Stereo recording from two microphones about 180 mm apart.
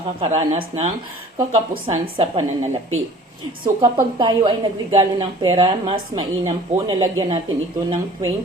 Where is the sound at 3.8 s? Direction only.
25° right (ahead or behind).